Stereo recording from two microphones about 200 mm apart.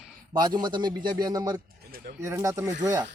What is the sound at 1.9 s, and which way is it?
Speech, 45° right (ahead or behind).